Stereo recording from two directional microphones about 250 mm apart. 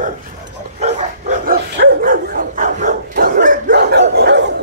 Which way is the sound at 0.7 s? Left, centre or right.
Right.